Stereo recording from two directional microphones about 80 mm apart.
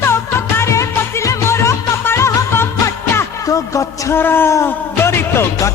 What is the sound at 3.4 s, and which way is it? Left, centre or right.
Music, left.